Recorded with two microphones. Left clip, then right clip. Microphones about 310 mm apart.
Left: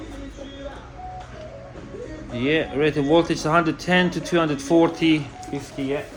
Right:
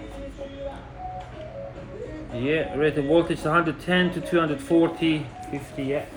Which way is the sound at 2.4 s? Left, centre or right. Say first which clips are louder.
Left 2 dB; left.